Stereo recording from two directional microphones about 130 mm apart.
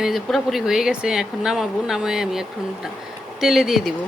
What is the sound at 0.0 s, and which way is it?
Speech, centre (ahead or behind).